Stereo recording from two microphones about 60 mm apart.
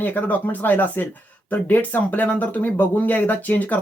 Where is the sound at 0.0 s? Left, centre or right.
Left.